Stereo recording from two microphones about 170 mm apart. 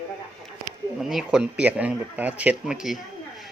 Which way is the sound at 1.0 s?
Centre (ahead or behind).